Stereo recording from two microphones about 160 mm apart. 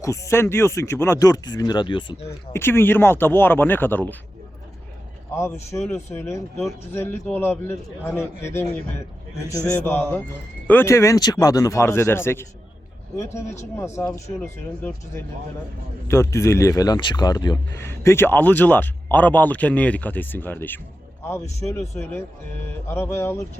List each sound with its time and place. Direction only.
0.0 s speech: 20° left (ahead or behind)
2.5 s speech: 15° left (ahead or behind)
5.3 s speech: 15° left (ahead or behind)
17.8 s speech: 15° left (ahead or behind)